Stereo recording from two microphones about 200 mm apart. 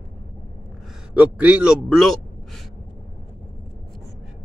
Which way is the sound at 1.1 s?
5° right (ahead or behind).